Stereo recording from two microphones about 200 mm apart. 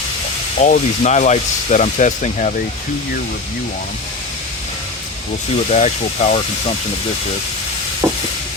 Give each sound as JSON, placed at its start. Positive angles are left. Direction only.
{"t": 0.6, "sound": "speech", "side_deg": 35}
{"t": 5.7, "sound": "speech", "side_deg": 35}
{"t": 8.0, "sound": "a sound", "side_deg": -5}